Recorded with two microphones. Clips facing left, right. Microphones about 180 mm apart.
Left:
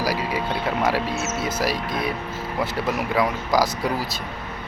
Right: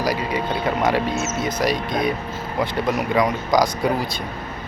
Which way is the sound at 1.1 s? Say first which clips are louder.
Right 2 dB; 65° left (ahead or behind).